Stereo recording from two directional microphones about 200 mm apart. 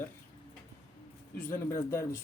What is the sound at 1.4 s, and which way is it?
Speech, 10° left (ahead or behind).